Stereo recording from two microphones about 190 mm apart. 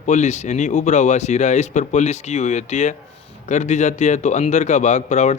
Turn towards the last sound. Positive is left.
turn(degrees=40)  # may be behind; listen again after turning